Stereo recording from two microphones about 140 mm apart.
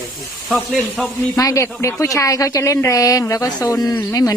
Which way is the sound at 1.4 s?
25° left (ahead or behind).